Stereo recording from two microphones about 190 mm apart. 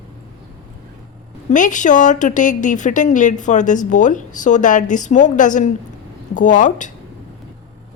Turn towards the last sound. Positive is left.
turn(degrees=40)  # may be behind; listen again after turning